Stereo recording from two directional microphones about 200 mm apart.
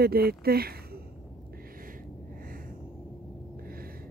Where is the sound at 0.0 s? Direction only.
50° right (ahead or behind).